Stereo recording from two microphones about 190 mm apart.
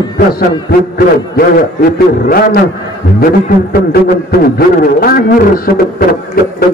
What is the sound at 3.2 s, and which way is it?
Speech, 50° left (ahead or behind).